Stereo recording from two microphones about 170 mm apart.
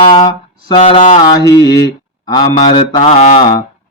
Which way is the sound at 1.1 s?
20° left (ahead or behind).